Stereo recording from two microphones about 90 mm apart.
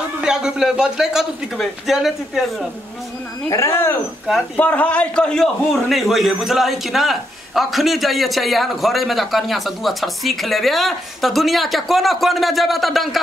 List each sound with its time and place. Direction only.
0.2 s a man's voice: 5° right (ahead or behind)
3.4 s speech: 35° left (ahead or behind)
4.6 s a man's voice: 15° left (ahead or behind); by 13.2 s centre (ahead or behind)